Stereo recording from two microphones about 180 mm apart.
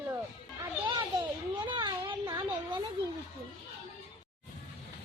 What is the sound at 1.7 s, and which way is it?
Speech, 25° right (ahead or behind).